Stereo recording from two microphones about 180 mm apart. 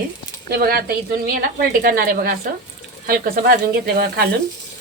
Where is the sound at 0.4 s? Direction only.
55° right (ahead or behind).